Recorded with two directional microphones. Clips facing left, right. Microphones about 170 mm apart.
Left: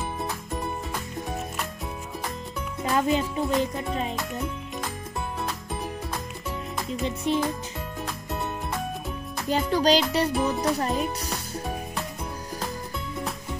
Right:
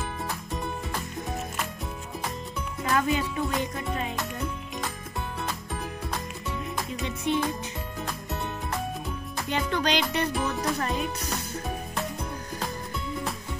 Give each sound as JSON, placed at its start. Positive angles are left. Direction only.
{"t": 2.8, "sound": "speech", "side_deg": 25}
{"t": 7.3, "sound": "music", "side_deg": 35}
{"t": 9.5, "sound": "music", "side_deg": 35}
{"t": 10.3, "sound": "speech", "side_deg": 0}
{"t": 10.8, "sound": "speech", "side_deg": 35}